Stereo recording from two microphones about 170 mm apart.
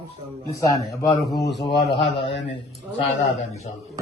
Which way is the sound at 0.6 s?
20° left (ahead or behind).